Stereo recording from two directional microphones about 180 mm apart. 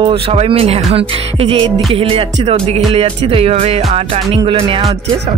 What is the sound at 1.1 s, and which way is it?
Music, 30° right (ahead or behind).